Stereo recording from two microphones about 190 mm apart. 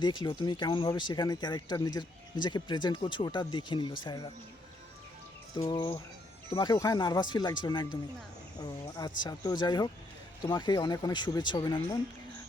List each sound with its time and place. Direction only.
0.0 s speech: 25° left (ahead or behind)
5.5 s a sound: 15° left (ahead or behind)
6.5 s speech: 25° left (ahead or behind)